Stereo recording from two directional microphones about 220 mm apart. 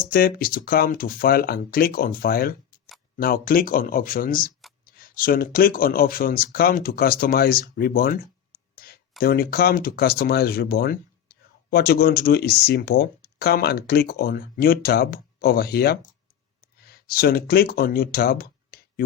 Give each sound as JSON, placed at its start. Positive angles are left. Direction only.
{"t": 0.0, "sound": "speech", "side_deg": 40}
{"t": 8.7, "sound": "a sound", "side_deg": 45}
{"t": 9.2, "sound": "speech", "side_deg": 40}